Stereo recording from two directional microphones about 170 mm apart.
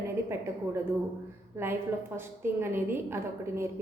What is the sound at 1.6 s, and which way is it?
A woman's voice, 15° right (ahead or behind).